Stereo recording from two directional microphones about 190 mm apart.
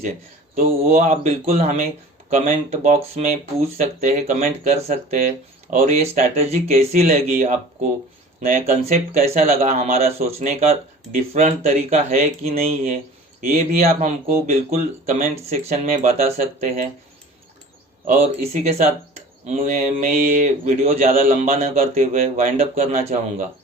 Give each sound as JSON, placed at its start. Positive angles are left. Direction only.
{"t": 0.5, "sound": "speech", "side_deg": -35}
{"t": 18.2, "sound": "speech", "side_deg": -35}